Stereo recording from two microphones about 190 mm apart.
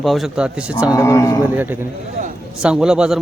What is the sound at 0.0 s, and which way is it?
Speech, centre (ahead or behind).